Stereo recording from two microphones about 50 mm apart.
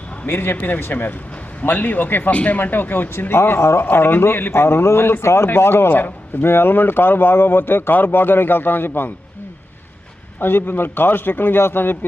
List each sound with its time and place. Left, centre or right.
0.3 s a man's voice: left
3.8 s a man's voice: left
10.4 s a man's voice: left